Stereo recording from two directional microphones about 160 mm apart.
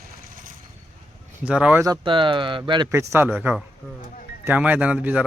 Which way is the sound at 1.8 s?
25° right (ahead or behind).